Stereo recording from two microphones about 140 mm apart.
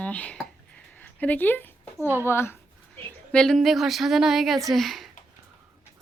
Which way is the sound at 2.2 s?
15° left (ahead or behind).